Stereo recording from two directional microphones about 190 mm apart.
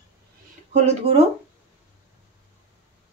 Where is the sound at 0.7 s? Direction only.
35° right (ahead or behind).